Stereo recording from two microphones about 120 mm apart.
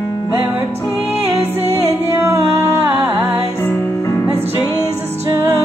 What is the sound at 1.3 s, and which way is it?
Music, 20° right (ahead or behind).